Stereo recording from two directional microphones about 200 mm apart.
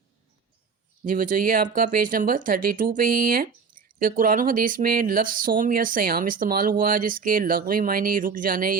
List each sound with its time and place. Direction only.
1.0 s speech: 40° right (ahead or behind)